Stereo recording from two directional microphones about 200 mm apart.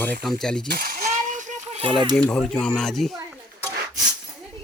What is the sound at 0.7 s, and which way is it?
Coin, 45° right (ahead or behind).